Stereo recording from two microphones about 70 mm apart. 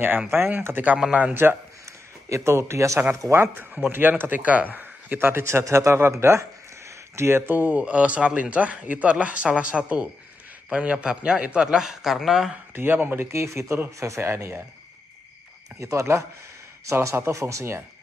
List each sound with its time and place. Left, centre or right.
0.3 s speech: right
0.9 s a man's voice: centre
1.3 s speech: right
1.9 s a sound: right
3.2 s speech: right
3.9 s speech: right
5.4 s a man's voice: right; by 12.5 s centre
12.7 s speech: right
13.3 s speech: right
14.3 s speech: right
15.8 s speech: right